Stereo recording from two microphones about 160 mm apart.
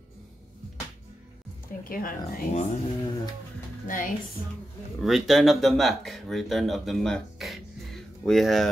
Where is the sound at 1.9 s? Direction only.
60° left (ahead or behind).